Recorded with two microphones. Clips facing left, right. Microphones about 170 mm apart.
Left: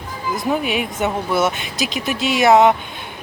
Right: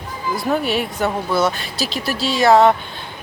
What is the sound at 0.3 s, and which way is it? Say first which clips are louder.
Speech: even; 15° left (ahead or behind).